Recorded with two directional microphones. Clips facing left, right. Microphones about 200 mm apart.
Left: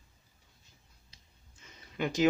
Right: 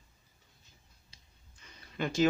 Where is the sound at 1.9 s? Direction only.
15° left (ahead or behind).